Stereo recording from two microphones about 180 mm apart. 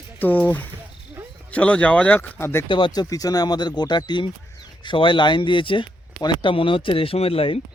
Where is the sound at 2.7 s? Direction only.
25° left (ahead or behind).